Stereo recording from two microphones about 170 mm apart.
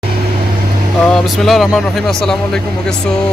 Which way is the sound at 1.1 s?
Centre (ahead or behind).